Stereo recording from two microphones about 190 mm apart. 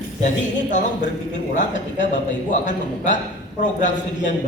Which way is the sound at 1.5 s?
40° left (ahead or behind).